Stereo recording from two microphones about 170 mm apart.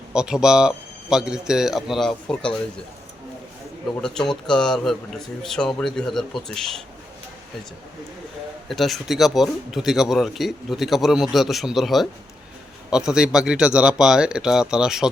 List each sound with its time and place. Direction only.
0.1 s speech: 5° right (ahead or behind)
4.0 s speech: 5° left (ahead or behind)
8.7 s speech: centre (ahead or behind)